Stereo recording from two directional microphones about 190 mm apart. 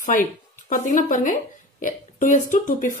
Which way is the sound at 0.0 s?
45° left (ahead or behind).